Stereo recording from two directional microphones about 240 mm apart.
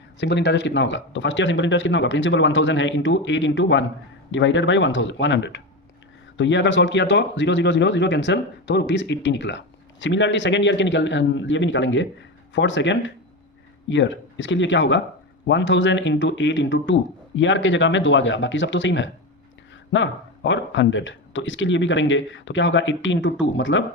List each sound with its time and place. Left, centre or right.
0.2 s speech: left